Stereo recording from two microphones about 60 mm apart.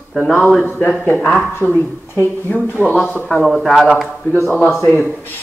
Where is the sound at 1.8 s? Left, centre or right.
Left.